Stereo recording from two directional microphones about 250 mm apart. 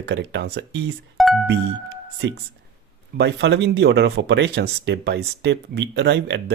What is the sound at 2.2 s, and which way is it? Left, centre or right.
Speech, right.